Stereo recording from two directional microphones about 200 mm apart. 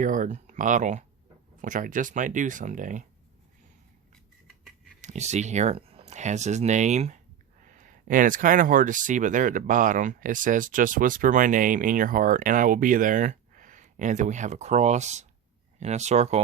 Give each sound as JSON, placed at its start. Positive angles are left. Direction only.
{"t": 0.0, "sound": "speech", "side_deg": -40}
{"t": 4.9, "sound": "speech", "side_deg": -35}